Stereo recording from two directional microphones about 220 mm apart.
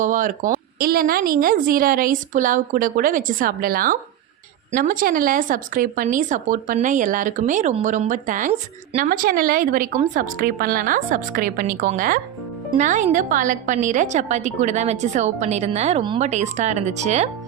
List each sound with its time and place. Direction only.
0.0 s speech: 35° right (ahead or behind)